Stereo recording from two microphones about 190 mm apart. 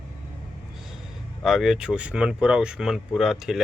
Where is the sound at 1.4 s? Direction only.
Centre (ahead or behind).